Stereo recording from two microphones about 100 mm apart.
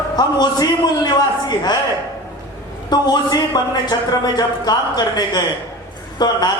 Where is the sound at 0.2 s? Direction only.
45° left (ahead or behind).